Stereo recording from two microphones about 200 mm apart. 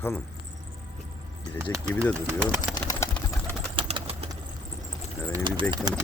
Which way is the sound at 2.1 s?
10° right (ahead or behind).